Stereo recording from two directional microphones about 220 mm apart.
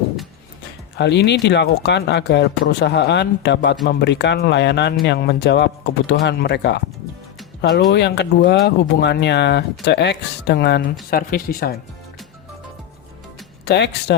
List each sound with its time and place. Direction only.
0.9 s speech: 50° left (ahead or behind)
7.9 s speech: 50° left (ahead or behind)
13.7 s speech: 50° left (ahead or behind)